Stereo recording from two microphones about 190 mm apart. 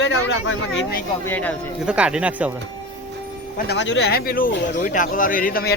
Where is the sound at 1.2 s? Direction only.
10° left (ahead or behind).